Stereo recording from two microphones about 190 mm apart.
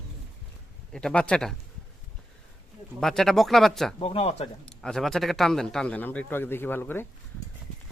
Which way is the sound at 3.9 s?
30° left (ahead or behind).